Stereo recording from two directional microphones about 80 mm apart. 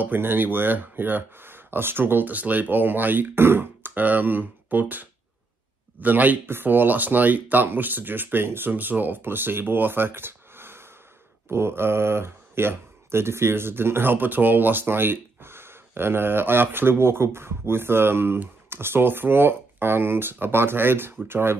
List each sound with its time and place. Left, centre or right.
0.0 s speech: right